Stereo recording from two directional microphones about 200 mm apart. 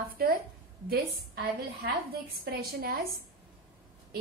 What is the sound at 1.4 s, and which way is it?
A woman's voice, 45° right (ahead or behind).